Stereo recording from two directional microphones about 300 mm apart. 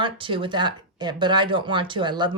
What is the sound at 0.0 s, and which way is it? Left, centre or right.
A woman's voice, centre.